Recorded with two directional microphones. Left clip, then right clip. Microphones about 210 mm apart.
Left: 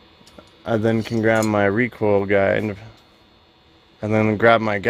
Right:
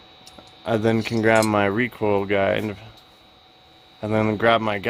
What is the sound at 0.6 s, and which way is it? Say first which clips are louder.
Speech: left 1 dB; 10° left (ahead or behind).